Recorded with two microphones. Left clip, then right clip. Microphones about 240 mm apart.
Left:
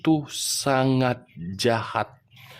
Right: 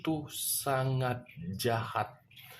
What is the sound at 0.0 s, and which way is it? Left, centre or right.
Speech, left.